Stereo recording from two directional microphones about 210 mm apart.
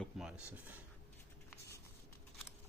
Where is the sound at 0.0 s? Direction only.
5° right (ahead or behind).